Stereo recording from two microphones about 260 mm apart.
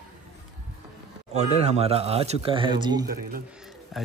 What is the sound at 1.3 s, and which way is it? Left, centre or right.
Speech, right.